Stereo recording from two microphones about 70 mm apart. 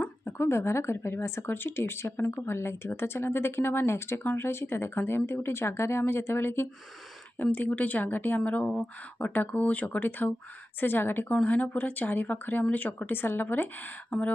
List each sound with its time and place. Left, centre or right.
0.0 s speech: left